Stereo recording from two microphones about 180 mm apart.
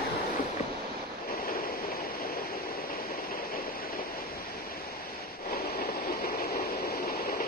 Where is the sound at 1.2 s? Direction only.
55° left (ahead or behind).